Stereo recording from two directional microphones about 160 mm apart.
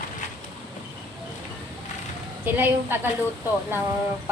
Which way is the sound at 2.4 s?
10° right (ahead or behind).